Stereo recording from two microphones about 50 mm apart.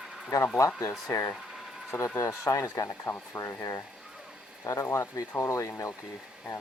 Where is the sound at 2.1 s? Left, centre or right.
Left.